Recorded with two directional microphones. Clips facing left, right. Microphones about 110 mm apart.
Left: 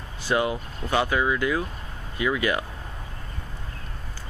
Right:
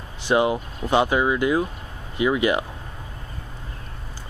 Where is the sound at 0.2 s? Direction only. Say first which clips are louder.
Right 4 dB; 20° right (ahead or behind).